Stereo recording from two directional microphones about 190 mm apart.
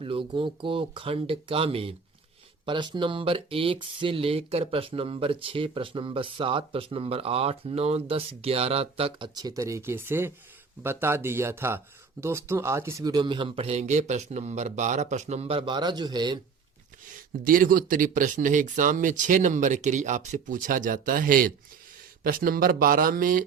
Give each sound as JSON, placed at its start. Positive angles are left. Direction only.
{"t": 0.0, "sound": "speech", "side_deg": -30}
{"t": 17.4, "sound": "speech", "side_deg": -45}